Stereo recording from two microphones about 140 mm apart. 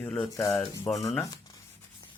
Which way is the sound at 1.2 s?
25° left (ahead or behind).